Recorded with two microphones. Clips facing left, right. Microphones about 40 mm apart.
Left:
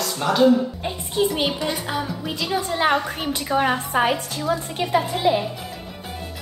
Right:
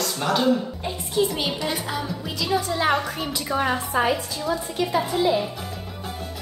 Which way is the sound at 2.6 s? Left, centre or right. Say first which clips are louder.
Left 2 dB; left.